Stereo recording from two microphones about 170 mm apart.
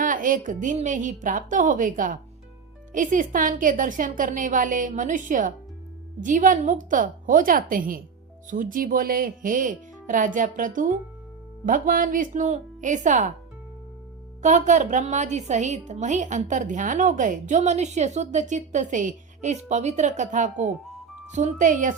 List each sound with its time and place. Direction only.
0.0 s a woman's voice: 50° right (ahead or behind)
14.4 s a woman's voice: 45° right (ahead or behind)